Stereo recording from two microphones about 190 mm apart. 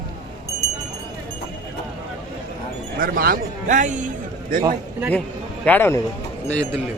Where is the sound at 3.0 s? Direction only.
50° right (ahead or behind).